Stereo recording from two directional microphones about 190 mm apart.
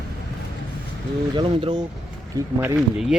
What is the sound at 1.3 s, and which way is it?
Speech, 25° right (ahead or behind).